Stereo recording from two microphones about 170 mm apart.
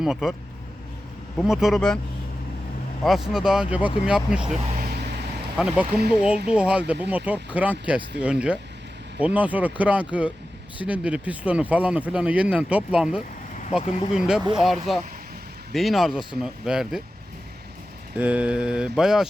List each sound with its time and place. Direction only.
0.0 s mantra: centre (ahead or behind)
1.4 s mantra: centre (ahead or behind)
3.0 s mantra: centre (ahead or behind)
5.5 s mantra: 5° right (ahead or behind)
6.5 s speech: 5° right (ahead or behind)
8.2 s mantra: 5° right (ahead or behind)
9.2 s speech: 10° right (ahead or behind)
13.7 s speech: 35° left (ahead or behind)
14.1 s mantra: 5° right (ahead or behind)
18.2 s mantra: 10° right (ahead or behind)